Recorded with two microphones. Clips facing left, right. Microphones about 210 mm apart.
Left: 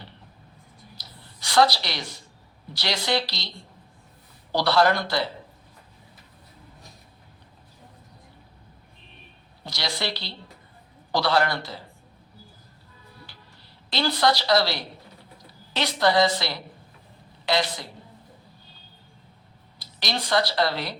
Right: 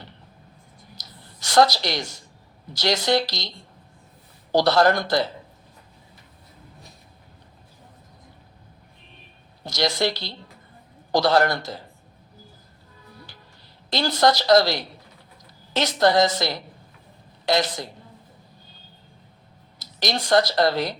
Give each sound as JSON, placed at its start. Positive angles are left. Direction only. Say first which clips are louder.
{"t": 0.9, "sound": "a sound", "louder": "right 1 dB", "side_deg": -45}
{"t": 2.7, "sound": "a woman's voice", "louder": "right 5 dB", "side_deg": -45}
{"t": 4.5, "sound": "a woman's voice", "louder": "right 3 dB", "side_deg": -45}
{"t": 9.6, "sound": "a woman's voice", "louder": "right 7 dB", "side_deg": -45}
{"t": 13.9, "sound": "a woman's voice", "louder": "right 3 dB", "side_deg": -45}
{"t": 19.8, "sound": "speech", "louder": "right 4 dB", "side_deg": -45}